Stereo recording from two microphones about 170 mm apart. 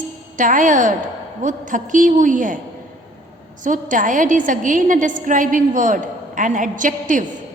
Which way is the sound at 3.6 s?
50° right (ahead or behind).